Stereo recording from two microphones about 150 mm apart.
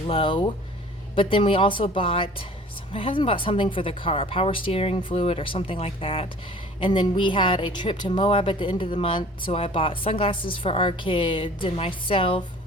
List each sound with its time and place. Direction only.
0.1 s speech: 35° left (ahead or behind)